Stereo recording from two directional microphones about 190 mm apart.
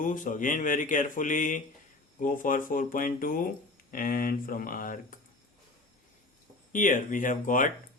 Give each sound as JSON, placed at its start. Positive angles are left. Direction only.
{"t": 0.0, "sound": "speech", "side_deg": 45}
{"t": 6.7, "sound": "speech", "side_deg": 45}